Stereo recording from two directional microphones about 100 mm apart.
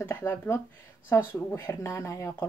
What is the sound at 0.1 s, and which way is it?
Speech, 25° left (ahead or behind).